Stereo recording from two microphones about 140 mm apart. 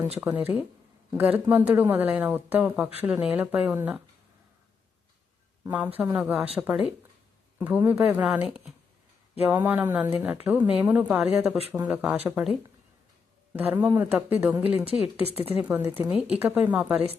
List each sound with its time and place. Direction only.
0.2 s speech: 10° right (ahead or behind)
5.6 s speech: 10° right (ahead or behind)
15.2 s a woman's voice: 45° left (ahead or behind)
15.6 s speech: 10° right (ahead or behind)